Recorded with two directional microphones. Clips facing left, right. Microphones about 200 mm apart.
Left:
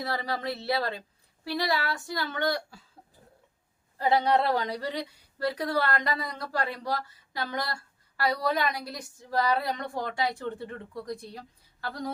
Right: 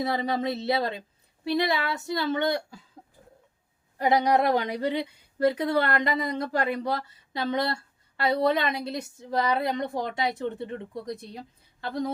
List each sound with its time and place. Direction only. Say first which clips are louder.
0.0 s a woman's voice: right 5 dB; 20° right (ahead or behind)
3.9 s a woman's voice: right 2 dB; 20° right (ahead or behind)